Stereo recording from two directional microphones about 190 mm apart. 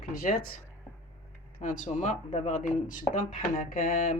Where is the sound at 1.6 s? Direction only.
35° left (ahead or behind).